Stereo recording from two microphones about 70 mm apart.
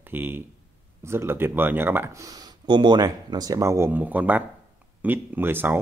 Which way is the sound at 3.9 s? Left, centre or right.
Right.